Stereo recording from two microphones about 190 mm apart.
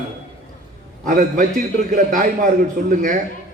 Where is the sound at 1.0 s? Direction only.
45° right (ahead or behind).